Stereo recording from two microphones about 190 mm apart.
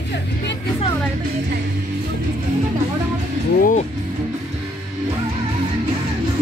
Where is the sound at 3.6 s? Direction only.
45° left (ahead or behind).